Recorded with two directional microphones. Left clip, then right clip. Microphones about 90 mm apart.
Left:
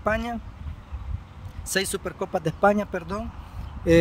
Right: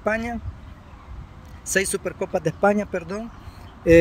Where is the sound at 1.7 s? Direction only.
25° left (ahead or behind).